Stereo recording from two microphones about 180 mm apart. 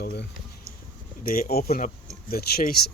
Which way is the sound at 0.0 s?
55° left (ahead or behind).